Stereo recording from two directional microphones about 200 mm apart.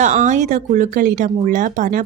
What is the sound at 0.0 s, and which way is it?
Speech, 35° right (ahead or behind).